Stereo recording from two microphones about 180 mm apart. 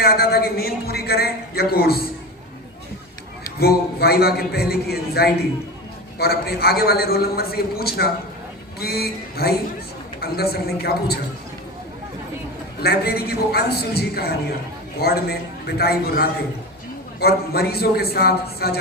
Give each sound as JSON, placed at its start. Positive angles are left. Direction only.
{"t": 0.0, "sound": "a woman's voice", "side_deg": 60}
{"t": 3.6, "sound": "a woman's voice", "side_deg": 60}
{"t": 12.8, "sound": "a woman's voice", "side_deg": 60}